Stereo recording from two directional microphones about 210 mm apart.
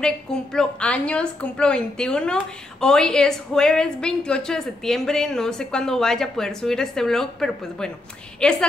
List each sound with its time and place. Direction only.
0.0 s a woman's voice: 5° left (ahead or behind)